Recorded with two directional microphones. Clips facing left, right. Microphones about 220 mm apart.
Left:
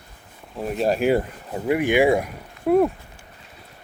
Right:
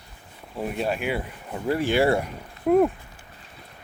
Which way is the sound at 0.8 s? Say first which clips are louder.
Left 8 dB; 40° left (ahead or behind).